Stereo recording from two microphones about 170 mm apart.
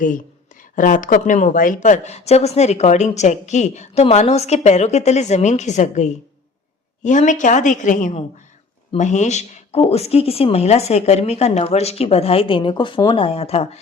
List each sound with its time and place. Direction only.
0.8 s a woman's voice: 50° left (ahead or behind)